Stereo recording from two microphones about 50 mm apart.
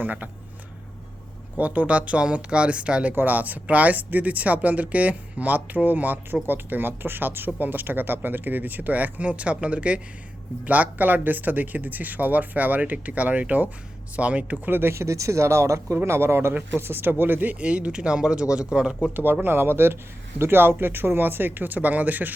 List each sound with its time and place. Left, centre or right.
0.0 s speech: right
1.5 s speech: right
3.2 s speech: right
14.7 s speech: right
16.0 s speech: right
17.6 s speech: right
19.1 s speech: right